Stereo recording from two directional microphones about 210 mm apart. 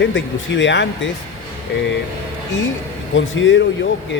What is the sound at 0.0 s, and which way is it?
Speech, 60° left (ahead or behind).